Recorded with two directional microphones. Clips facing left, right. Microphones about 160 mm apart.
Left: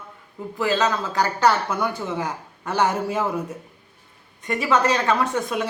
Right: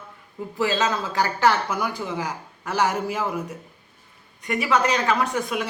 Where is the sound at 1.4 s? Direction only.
5° right (ahead or behind).